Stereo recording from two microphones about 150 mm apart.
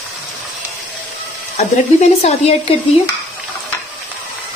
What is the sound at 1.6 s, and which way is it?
Speech, 50° left (ahead or behind).